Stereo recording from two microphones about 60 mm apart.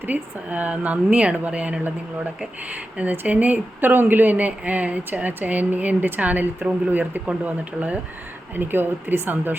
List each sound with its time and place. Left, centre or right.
0.0 s speech: right
8.5 s speech: right